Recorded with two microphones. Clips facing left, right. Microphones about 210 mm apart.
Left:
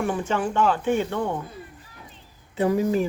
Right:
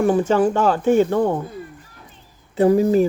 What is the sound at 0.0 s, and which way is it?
Speech, 40° right (ahead or behind).